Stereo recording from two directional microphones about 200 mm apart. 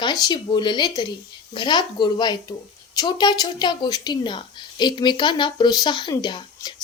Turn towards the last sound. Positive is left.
turn(degrees=20)  # may be behind; listen again after turning